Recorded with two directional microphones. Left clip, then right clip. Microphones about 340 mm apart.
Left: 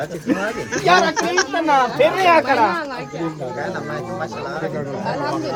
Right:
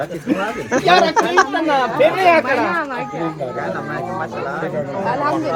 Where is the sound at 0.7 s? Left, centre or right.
Centre.